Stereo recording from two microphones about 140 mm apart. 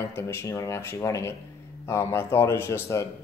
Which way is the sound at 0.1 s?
20° left (ahead or behind).